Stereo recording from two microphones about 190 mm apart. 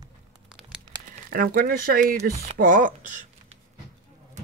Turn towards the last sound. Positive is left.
turn(degrees=-45)  # may be behind; listen again after turning